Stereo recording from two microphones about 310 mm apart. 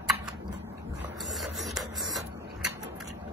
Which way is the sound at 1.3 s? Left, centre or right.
Centre.